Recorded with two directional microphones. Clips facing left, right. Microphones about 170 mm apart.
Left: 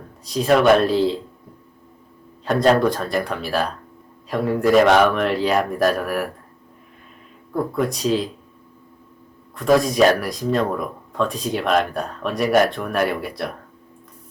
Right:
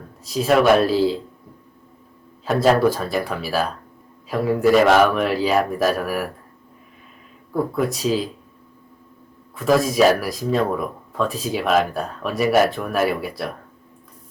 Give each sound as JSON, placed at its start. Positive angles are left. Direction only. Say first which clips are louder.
{"t": 0.3, "sound": "speech", "louder": "left 1 dB", "side_deg": 0}
{"t": 2.4, "sound": "speech", "louder": "even", "side_deg": -5}
{"t": 7.5, "sound": "speech", "louder": "even", "side_deg": 0}
{"t": 9.6, "sound": "speech", "louder": "left 1 dB", "side_deg": 0}